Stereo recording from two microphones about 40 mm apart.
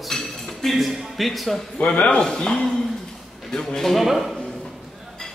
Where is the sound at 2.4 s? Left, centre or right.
Left.